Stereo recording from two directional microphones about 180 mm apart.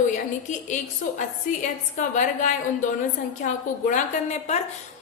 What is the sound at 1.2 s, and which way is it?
A woman's voice, 45° left (ahead or behind).